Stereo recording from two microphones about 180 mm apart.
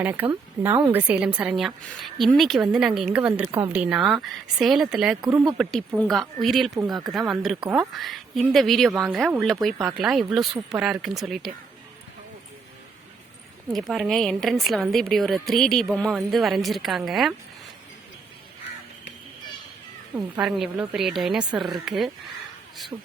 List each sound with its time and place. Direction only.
0.0 s a woman's voice: 10° right (ahead or behind)
5.2 s speech: 20° right (ahead or behind)
6.0 s a woman's voice: centre (ahead or behind)
13.7 s a woman's voice: centre (ahead or behind)
20.1 s a woman's voice: 5° right (ahead or behind)